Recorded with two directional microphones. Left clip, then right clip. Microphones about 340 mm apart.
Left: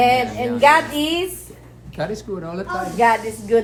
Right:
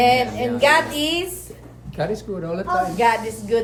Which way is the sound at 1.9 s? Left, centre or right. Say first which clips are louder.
Right 1 dB; centre.